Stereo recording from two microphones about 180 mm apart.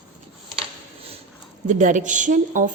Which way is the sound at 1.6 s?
45° right (ahead or behind).